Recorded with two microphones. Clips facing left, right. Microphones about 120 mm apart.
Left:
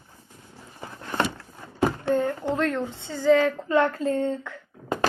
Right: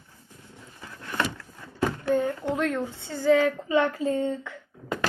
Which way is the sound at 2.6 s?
5° right (ahead or behind).